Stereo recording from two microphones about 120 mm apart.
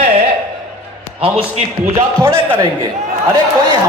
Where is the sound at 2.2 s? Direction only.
20° right (ahead or behind).